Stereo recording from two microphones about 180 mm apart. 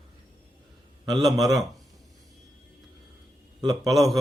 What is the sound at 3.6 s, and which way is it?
Speech, 20° right (ahead or behind).